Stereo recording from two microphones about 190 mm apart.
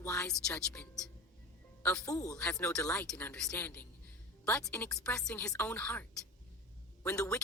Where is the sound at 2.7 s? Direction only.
5° left (ahead or behind).